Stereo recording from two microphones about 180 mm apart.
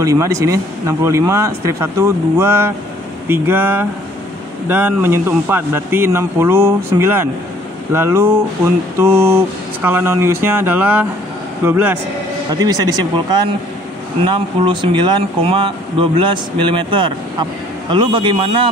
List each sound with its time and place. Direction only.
0.0 s speech: 15° right (ahead or behind)